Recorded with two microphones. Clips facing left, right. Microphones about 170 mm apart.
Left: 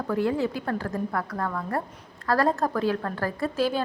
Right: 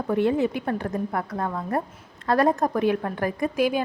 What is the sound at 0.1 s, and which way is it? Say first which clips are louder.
A woman's voice: right 3 dB; 20° right (ahead or behind).